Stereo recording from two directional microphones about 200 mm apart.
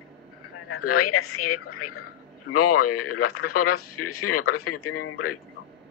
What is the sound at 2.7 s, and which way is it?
A woman's voice, 90° left.